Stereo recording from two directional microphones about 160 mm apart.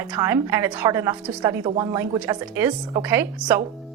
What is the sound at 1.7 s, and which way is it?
Speech, 30° right (ahead or behind).